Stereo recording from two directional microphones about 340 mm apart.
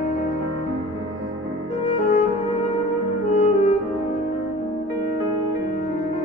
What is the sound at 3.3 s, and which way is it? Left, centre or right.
French horn, centre.